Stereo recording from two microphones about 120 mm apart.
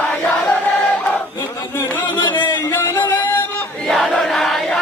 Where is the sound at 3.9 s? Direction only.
Centre (ahead or behind).